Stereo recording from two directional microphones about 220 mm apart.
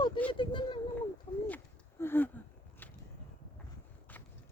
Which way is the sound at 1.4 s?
10° left (ahead or behind).